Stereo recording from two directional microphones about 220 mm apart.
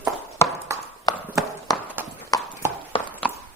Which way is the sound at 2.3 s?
15° left (ahead or behind).